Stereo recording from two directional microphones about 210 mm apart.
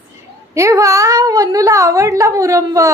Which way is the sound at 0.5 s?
15° right (ahead or behind).